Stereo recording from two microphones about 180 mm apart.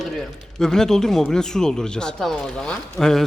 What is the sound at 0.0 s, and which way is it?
Speech, 5° left (ahead or behind).